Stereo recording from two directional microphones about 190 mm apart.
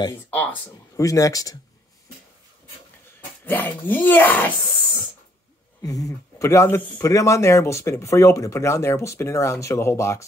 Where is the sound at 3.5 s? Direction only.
10° left (ahead or behind).